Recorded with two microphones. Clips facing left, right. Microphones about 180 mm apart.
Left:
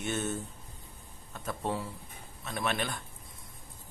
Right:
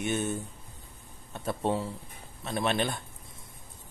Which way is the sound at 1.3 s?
30° right (ahead or behind).